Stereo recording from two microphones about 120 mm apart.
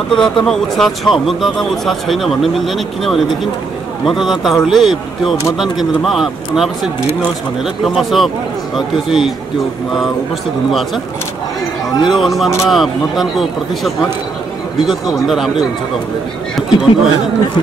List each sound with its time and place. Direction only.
0.1 s speech: 5° left (ahead or behind)
11.9 s speech: 40° left (ahead or behind)
12.2 s speech: centre (ahead or behind)
16.5 s speech: 5° right (ahead or behind)